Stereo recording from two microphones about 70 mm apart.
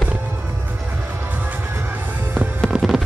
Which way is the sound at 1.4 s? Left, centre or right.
Right.